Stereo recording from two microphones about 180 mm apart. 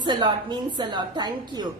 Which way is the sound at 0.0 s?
25° right (ahead or behind).